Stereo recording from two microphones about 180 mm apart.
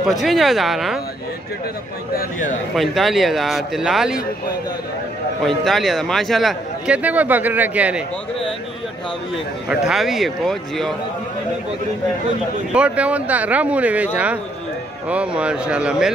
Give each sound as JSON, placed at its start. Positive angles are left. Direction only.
{"t": 0.0, "sound": "speech", "side_deg": 0}
{"t": 2.1, "sound": "speech", "side_deg": 45}
{"t": 2.7, "sound": "speech", "side_deg": 0}
{"t": 5.6, "sound": "speech", "side_deg": 0}
{"t": 9.7, "sound": "speech", "side_deg": -5}
{"t": 12.7, "sound": "speech", "side_deg": -5}